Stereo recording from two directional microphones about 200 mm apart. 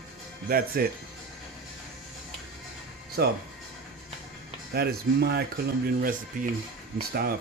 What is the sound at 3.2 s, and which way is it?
Speech, 55° right (ahead or behind).